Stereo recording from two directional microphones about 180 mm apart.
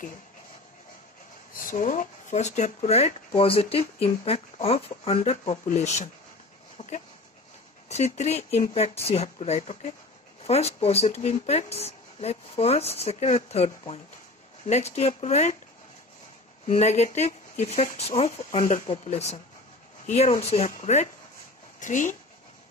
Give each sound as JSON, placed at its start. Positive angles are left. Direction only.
{"t": 1.5, "sound": "speech", "side_deg": 50}
{"t": 6.8, "sound": "dog", "side_deg": 30}
{"t": 7.9, "sound": "speech", "side_deg": 40}
{"t": 16.6, "sound": "speech", "side_deg": 40}